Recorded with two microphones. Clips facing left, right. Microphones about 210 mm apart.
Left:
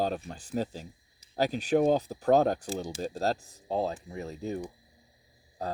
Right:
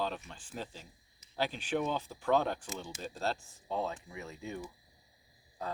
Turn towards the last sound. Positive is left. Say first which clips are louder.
# left 5 dB
turn(degrees=35)  # may be behind; listen again after turning